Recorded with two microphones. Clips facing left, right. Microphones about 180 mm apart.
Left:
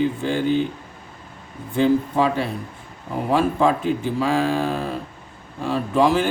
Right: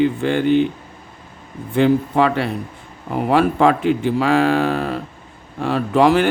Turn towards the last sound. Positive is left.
turn(degrees=-70)  # may be behind; listen again after turning